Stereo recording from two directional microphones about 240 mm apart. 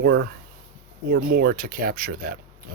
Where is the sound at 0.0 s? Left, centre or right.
Right.